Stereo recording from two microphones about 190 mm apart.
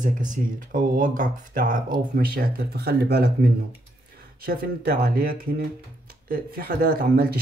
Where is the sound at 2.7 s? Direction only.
55° right (ahead or behind).